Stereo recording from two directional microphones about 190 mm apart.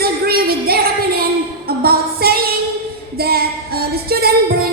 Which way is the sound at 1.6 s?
55° right (ahead or behind).